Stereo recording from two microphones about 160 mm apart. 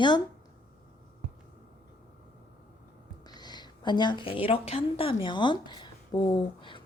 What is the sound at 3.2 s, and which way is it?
A woman's voice, 25° left (ahead or behind).